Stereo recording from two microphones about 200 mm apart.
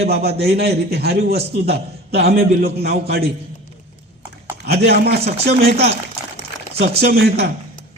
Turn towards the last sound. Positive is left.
turn(degrees=-55)  # may be behind; listen again after turning